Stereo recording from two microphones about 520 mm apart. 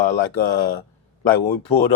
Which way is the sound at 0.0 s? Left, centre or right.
Left.